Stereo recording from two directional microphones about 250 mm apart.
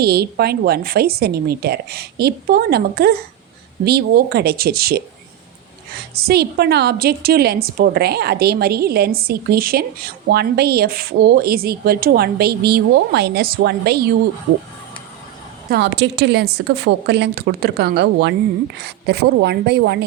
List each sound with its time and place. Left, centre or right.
0.0 s a woman's voice: right
6.2 s a woman's voice: right
15.7 s a woman's voice: right